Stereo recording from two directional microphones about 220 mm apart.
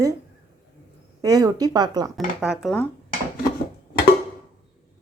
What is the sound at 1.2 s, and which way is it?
Speech, 15° right (ahead or behind).